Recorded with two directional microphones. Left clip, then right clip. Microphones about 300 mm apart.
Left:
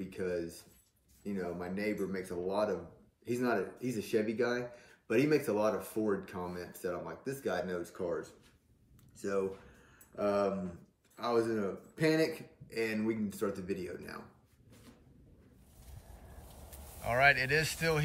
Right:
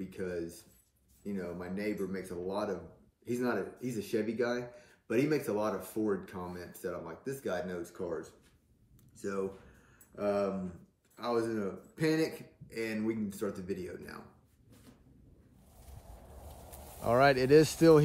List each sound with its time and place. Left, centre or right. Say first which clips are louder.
0.0 s speech: left 2 dB; centre
9.2 s a sound: left 2 dB; centre
11.1 s speech: left 1 dB; centre
15.9 s vehicle: right 2 dB; right
17.2 s speech: even; centre
17.5 s speech: right 8 dB; right